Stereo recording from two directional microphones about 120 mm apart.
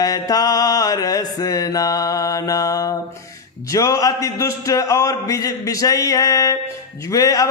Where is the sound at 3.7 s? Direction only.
30° left (ahead or behind).